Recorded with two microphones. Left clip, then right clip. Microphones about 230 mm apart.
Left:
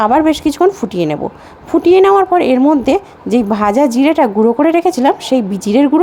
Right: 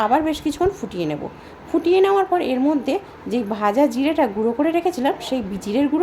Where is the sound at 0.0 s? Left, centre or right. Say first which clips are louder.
Left 8 dB; left.